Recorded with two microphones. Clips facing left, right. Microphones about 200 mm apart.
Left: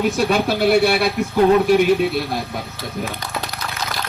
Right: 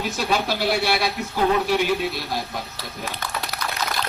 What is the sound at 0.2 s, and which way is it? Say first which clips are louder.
Speech: left 6 dB; 50° left (ahead or behind).